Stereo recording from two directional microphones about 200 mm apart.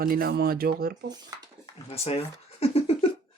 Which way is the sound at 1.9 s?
30° left (ahead or behind).